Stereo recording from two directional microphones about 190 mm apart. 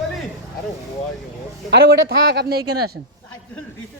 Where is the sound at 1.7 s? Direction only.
60° right (ahead or behind).